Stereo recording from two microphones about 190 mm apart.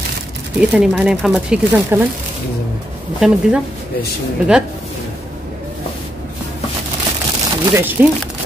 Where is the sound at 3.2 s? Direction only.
5° right (ahead or behind).